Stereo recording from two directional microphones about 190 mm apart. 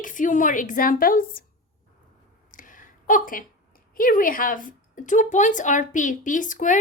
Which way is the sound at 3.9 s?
50° left (ahead or behind).